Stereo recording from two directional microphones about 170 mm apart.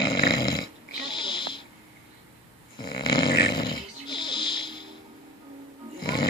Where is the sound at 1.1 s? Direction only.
30° left (ahead or behind).